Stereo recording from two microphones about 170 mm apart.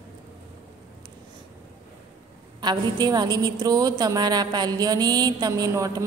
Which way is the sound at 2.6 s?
25° right (ahead or behind).